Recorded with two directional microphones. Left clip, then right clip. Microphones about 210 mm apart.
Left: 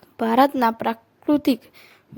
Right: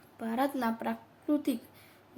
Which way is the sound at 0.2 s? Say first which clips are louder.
Left 14 dB; 50° left (ahead or behind).